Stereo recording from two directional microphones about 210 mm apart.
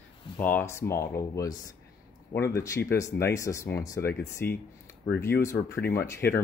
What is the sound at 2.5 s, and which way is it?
Speech, 15° left (ahead or behind).